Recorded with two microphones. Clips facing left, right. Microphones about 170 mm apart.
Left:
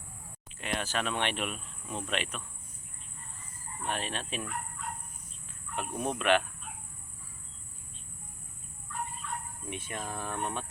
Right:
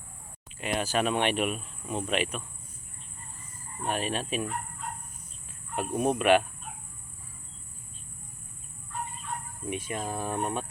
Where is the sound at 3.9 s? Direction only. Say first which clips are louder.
Right 5 dB; 10° right (ahead or behind).